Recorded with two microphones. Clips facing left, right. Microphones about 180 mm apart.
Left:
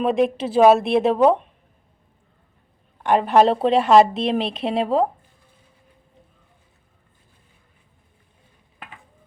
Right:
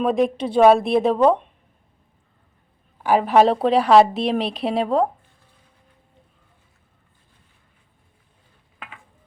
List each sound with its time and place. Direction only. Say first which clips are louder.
0.0 s a woman's voice: even; centre (ahead or behind)
3.0 s a woman's voice: even; 5° right (ahead or behind)